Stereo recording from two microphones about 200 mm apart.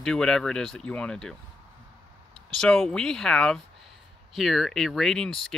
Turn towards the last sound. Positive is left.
turn(degrees=0)  # may be behind; listen again after turning